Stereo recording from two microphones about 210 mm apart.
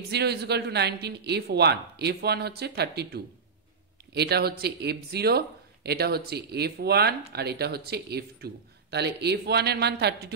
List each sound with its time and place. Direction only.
0.1 s speech: 50° right (ahead or behind)